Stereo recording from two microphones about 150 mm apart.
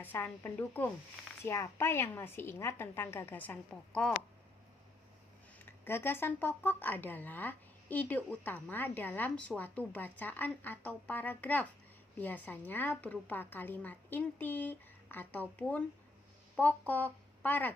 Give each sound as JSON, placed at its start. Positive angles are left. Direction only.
{"t": 0.0, "sound": "speech", "side_deg": 15}
{"t": 5.5, "sound": "speech", "side_deg": 15}